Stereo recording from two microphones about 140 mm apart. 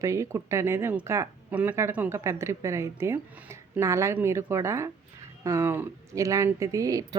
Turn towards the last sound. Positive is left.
turn(degrees=-25)  # may be behind; listen again after turning